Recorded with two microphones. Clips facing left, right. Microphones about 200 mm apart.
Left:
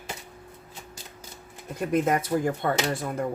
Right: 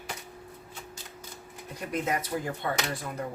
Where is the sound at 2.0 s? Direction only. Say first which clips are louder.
Left 6 dB; 50° left (ahead or behind).